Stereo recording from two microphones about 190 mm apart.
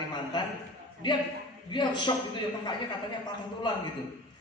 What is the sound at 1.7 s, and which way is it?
Speech, 25° left (ahead or behind).